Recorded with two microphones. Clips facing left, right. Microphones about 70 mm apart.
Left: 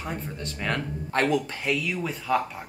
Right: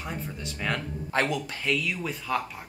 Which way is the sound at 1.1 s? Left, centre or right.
Left.